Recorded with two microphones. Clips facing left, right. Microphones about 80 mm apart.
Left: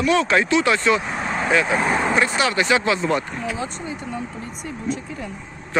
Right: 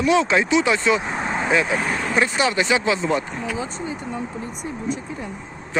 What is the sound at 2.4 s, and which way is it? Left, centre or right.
Speech, right.